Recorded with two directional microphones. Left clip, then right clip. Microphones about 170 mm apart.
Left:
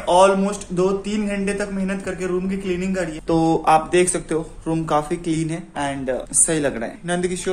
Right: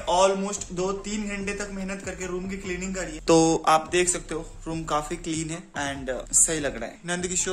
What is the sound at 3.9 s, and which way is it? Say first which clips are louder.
Speech: left 6 dB; 5° right (ahead or behind).